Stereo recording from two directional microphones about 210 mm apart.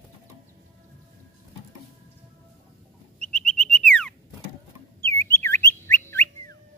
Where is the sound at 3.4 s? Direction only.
Centre (ahead or behind).